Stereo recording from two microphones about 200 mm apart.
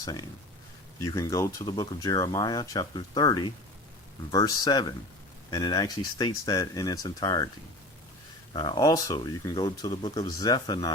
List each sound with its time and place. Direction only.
0.0 s speech: 20° left (ahead or behind)
8.5 s speech: 25° left (ahead or behind)